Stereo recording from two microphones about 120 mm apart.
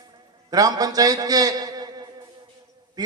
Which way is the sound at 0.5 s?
30° right (ahead or behind).